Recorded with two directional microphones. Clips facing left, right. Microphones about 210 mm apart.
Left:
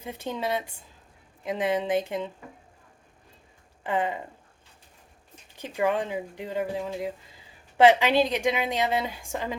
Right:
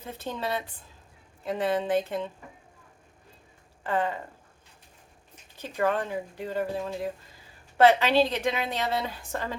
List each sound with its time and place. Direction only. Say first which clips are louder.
0.0 s a woman's voice: left 2 dB; 15° left (ahead or behind)
3.8 s a woman's voice: left 1 dB; 15° left (ahead or behind)
5.5 s a woman's voice: left 1 dB; 15° left (ahead or behind)